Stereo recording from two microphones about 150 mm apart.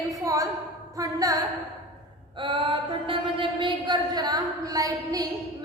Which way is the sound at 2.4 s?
35° right (ahead or behind).